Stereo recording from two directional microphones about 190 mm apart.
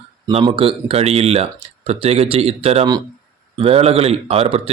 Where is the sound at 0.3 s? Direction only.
30° right (ahead or behind).